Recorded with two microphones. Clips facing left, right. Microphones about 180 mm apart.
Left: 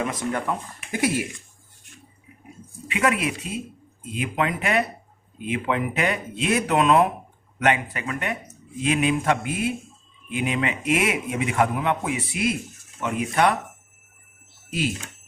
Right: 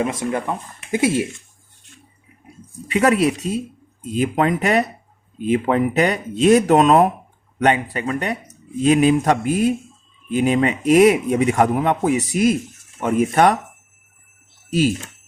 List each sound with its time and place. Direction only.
0.0 s speech: 25° right (ahead or behind)
2.8 s a man's voice: 40° right (ahead or behind)
14.7 s speech: 40° right (ahead or behind)